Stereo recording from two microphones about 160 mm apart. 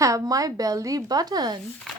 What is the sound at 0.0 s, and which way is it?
A woman's voice, 20° right (ahead or behind).